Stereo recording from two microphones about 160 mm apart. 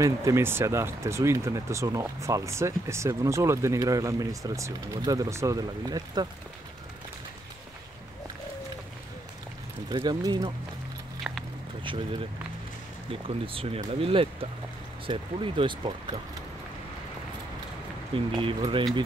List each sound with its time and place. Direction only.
0.0 s speech: 20° right (ahead or behind)
9.8 s speech: 25° right (ahead or behind)
11.3 s a sound: 10° right (ahead or behind)
11.8 s speech: 30° right (ahead or behind)
18.1 s speech: 35° right (ahead or behind)